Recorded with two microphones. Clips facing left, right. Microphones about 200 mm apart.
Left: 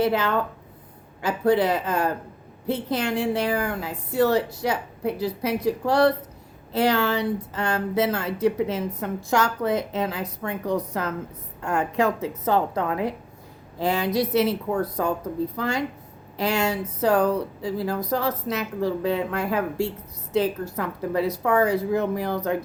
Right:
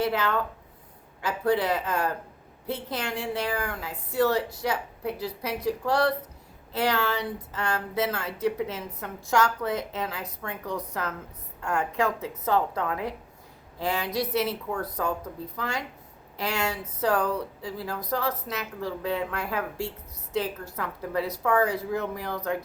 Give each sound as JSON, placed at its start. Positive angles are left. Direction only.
{"t": 0.0, "sound": "speech", "side_deg": 25}